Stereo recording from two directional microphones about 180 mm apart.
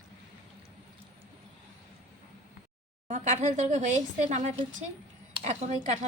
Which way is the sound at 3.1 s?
40° right (ahead or behind).